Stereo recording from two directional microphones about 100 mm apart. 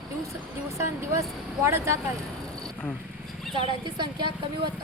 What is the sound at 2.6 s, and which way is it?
Insect, 15° left (ahead or behind).